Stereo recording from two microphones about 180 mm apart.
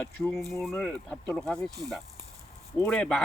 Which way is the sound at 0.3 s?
Centre (ahead or behind).